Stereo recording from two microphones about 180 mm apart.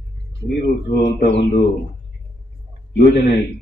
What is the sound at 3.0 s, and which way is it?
Speech, 55° left (ahead or behind).